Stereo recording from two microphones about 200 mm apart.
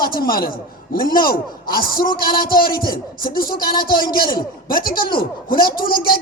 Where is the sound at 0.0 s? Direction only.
50° left (ahead or behind).